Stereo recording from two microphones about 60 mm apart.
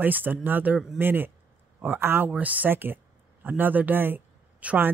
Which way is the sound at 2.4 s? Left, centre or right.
Right.